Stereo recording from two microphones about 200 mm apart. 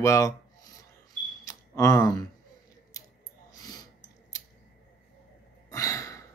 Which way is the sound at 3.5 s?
20° left (ahead or behind).